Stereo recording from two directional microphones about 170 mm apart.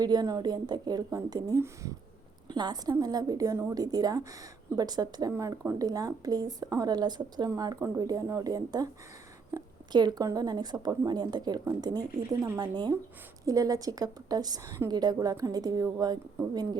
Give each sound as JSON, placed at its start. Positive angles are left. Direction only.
{"t": 0.0, "sound": "speech", "side_deg": -20}